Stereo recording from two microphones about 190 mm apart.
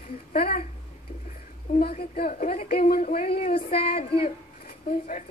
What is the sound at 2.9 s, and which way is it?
Speech, 45° left (ahead or behind).